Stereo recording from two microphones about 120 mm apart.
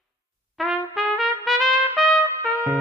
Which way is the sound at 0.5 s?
Centre (ahead or behind).